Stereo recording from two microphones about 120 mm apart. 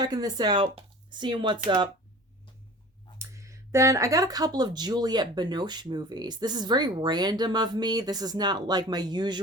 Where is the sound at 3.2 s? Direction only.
25° right (ahead or behind).